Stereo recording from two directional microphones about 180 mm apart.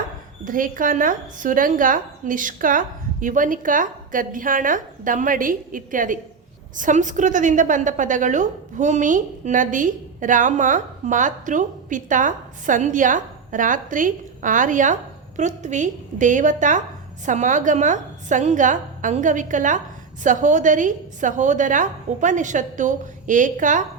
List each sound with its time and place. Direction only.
0.4 s a woman's voice: 50° right (ahead or behind)